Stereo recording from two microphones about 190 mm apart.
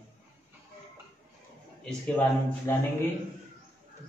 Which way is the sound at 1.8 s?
10° left (ahead or behind).